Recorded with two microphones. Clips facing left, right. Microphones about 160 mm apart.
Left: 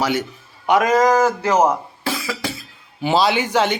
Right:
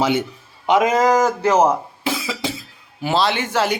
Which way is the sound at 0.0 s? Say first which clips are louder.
Right 2 dB; 20° right (ahead or behind).